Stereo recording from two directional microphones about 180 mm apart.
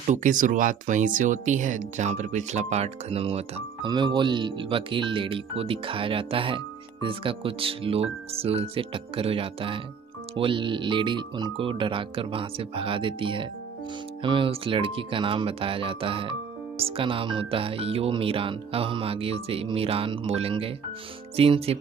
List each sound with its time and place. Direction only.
0.0 s speech: 45° right (ahead or behind)